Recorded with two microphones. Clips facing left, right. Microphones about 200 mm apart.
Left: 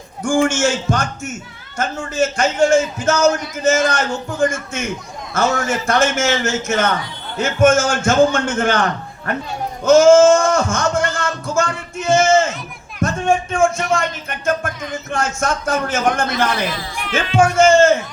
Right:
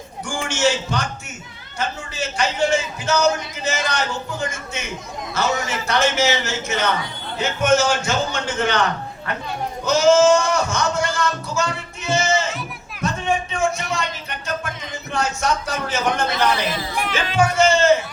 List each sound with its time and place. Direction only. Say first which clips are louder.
0.2 s a man's voice: left 7 dB; 50° left (ahead or behind)
9.8 s a man's voice: left 6 dB; 50° left (ahead or behind)
11.4 s music: left 4 dB; 50° left (ahead or behind)
13.0 s a man's voice: left 5 dB; 50° left (ahead or behind)